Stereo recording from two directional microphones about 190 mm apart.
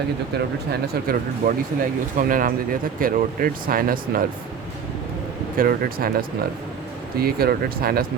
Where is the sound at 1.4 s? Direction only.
50° right (ahead or behind).